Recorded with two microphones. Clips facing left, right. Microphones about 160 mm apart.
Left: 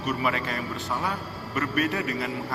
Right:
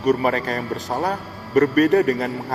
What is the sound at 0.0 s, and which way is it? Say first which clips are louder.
A man's voice: right 8 dB; 40° right (ahead or behind).